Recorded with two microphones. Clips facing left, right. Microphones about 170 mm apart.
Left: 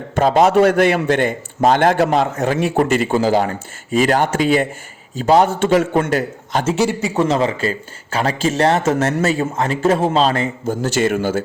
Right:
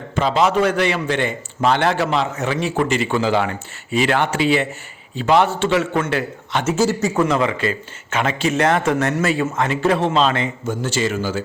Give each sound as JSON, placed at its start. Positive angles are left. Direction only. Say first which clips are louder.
{"t": 0.2, "sound": "a man's voice", "louder": "left 5 dB", "side_deg": 45}
{"t": 6.7, "sound": "a man's voice", "louder": "even", "side_deg": 15}
{"t": 7.2, "sound": "speech", "louder": "left 3 dB", "side_deg": 30}
{"t": 10.9, "sound": "speech", "louder": "left 5 dB", "side_deg": 55}